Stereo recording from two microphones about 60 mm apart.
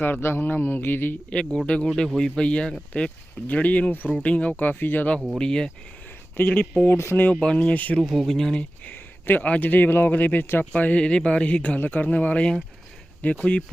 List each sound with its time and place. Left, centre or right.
0.0 s a sound: left
1.3 s speech: centre
5.4 s speech: centre
6.3 s speech: left
6.8 s speech: left
7.3 s speech: centre
8.0 s speech: centre
8.8 s a sound: left
9.5 s speech: left
11.8 s a sound: left
12.1 s speech: left